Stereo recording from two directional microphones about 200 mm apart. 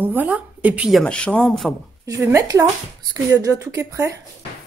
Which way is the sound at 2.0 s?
15° right (ahead or behind).